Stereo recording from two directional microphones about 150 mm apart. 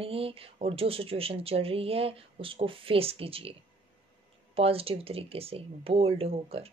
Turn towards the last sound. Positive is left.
turn(degrees=-40)  # may be behind; listen again after turning